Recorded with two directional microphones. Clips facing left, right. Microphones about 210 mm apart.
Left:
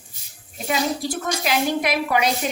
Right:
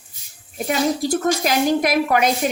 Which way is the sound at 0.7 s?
45° right (ahead or behind).